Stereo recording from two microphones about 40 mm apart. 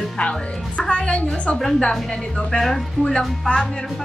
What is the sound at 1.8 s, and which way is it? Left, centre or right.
Speech, left.